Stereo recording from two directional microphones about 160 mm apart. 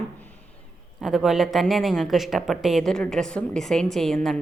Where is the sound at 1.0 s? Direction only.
Centre (ahead or behind).